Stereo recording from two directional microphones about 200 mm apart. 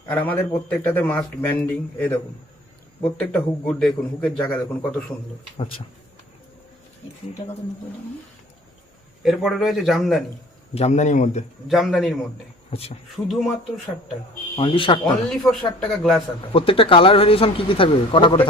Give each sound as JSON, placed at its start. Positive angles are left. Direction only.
{"t": 0.1, "sound": "a man's voice", "side_deg": 10}
{"t": 9.2, "sound": "speech", "side_deg": 0}
{"t": 10.8, "sound": "speech", "side_deg": 35}
{"t": 11.7, "sound": "speech", "side_deg": 0}
{"t": 12.7, "sound": "speech", "side_deg": 30}
{"t": 13.2, "sound": "speech", "side_deg": 0}
{"t": 14.5, "sound": "speech", "side_deg": 25}
{"t": 15.8, "sound": "speech", "side_deg": 0}
{"t": 16.5, "sound": "speech", "side_deg": 25}